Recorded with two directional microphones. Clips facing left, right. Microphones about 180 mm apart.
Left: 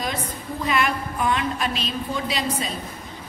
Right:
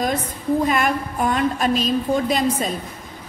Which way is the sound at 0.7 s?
45° right (ahead or behind).